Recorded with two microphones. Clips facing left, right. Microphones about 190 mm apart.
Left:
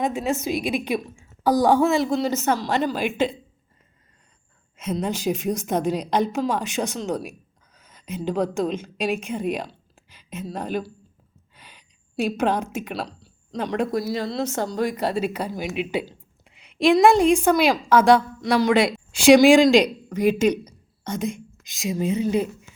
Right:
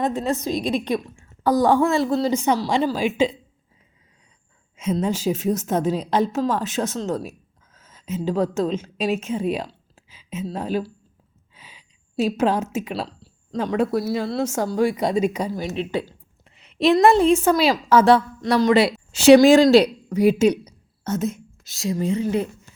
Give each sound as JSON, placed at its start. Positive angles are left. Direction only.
{"t": 0.0, "sound": "a woman's voice", "side_deg": 5}
{"t": 1.8, "sound": "speech", "side_deg": 20}
{"t": 2.2, "sound": "speech", "side_deg": -10}
{"t": 5.0, "sound": "a woman's voice", "side_deg": -5}
{"t": 11.5, "sound": "a sound", "side_deg": -5}
{"t": 12.4, "sound": "speech", "side_deg": -5}
{"t": 15.0, "sound": "speech", "side_deg": 5}
{"t": 17.4, "sound": "speech", "side_deg": -5}
{"t": 18.4, "sound": "speech", "side_deg": 10}
{"t": 18.7, "sound": "a woman's voice", "side_deg": -5}
{"t": 19.1, "sound": "speech", "side_deg": 10}
{"t": 20.1, "sound": "speech", "side_deg": -10}
{"t": 21.6, "sound": "speech", "side_deg": 20}